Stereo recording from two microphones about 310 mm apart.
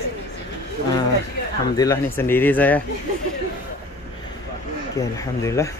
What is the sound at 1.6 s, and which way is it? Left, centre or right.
Speech, centre.